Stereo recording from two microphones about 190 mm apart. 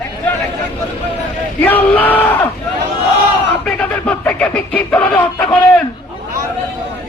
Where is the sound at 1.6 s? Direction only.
10° left (ahead or behind).